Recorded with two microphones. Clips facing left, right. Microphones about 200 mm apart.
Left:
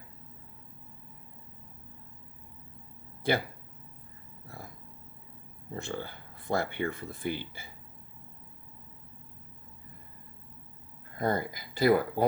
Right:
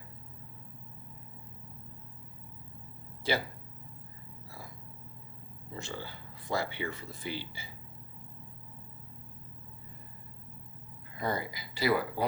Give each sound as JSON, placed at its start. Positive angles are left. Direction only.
{"t": 3.2, "sound": "speech", "side_deg": 55}
{"t": 5.7, "sound": "speech", "side_deg": 55}
{"t": 11.2, "sound": "speech", "side_deg": 50}